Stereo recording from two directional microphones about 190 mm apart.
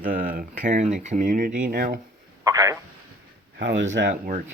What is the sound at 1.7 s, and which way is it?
Speech, 55° right (ahead or behind).